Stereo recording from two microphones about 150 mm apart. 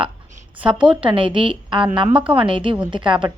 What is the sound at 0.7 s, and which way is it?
A woman's voice, 35° right (ahead or behind).